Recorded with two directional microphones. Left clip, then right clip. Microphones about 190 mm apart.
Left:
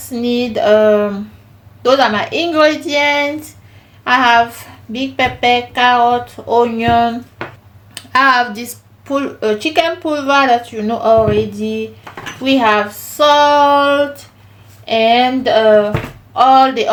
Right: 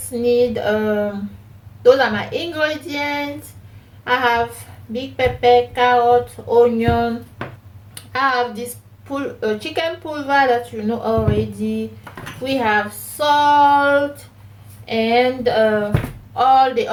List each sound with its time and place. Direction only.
0.1 s speech: 45° left (ahead or behind)
4.0 s a woman's voice: 50° left (ahead or behind)
8.1 s speech: 50° left (ahead or behind)